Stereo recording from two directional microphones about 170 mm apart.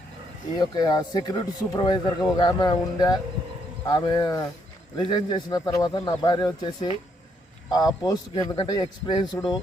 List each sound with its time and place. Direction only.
0.6 s speech: 25° left (ahead or behind)
8.0 s speech: 20° left (ahead or behind)